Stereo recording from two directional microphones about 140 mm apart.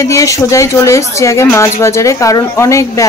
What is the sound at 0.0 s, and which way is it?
A woman's voice, 25° left (ahead or behind).